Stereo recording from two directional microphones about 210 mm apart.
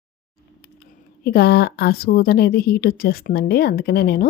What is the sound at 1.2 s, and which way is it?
Speech, 50° left (ahead or behind).